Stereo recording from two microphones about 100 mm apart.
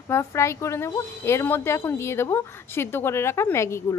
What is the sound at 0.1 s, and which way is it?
Speech, 30° left (ahead or behind).